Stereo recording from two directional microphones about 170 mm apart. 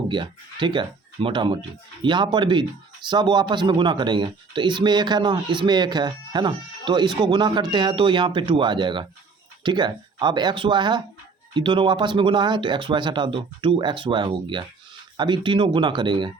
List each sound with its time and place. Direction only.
0.1 s speech: 30° right (ahead or behind)